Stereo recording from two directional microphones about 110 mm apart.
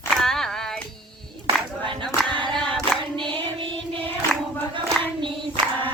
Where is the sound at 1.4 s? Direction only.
50° right (ahead or behind).